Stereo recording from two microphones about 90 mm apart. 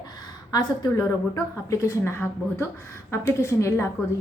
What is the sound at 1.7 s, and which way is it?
A woman's voice, 35° left (ahead or behind).